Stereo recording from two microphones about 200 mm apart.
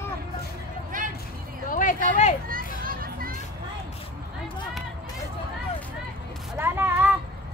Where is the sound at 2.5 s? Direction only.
45° right (ahead or behind).